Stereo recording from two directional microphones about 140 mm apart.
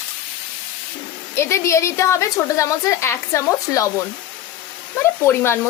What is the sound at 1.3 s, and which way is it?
A woman's voice, 20° left (ahead or behind).